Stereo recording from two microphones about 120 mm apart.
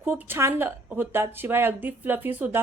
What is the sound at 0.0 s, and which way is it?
Speech, 15° right (ahead or behind).